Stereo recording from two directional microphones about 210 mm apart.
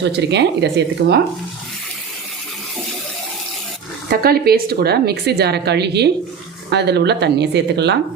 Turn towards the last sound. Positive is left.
turn(degrees=-55)  # may be behind; listen again after turning